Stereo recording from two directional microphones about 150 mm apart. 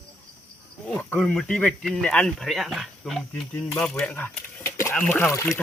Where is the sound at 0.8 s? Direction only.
5° left (ahead or behind).